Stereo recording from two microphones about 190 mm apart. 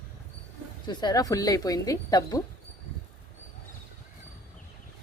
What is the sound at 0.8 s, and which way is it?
Speech, 20° left (ahead or behind).